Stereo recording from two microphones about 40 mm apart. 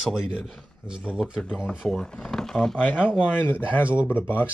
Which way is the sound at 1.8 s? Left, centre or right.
Centre.